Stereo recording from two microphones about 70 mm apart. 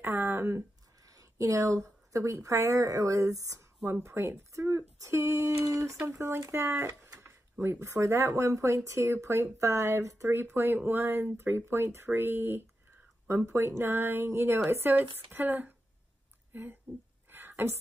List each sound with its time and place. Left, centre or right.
0.0 s speech: right
6.0 s speech: right
17.3 s a sound: right